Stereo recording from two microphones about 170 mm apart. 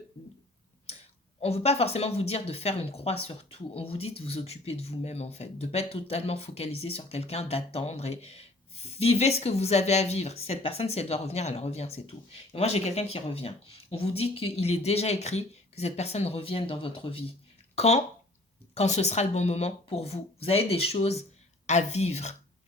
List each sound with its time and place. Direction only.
1.4 s speech: 35° left (ahead or behind)